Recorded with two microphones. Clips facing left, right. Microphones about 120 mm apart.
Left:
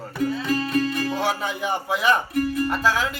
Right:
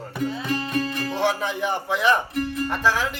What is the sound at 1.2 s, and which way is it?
Speech, 10° left (ahead or behind).